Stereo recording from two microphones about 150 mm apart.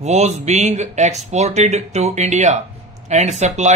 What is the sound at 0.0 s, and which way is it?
Speech, 50° right (ahead or behind).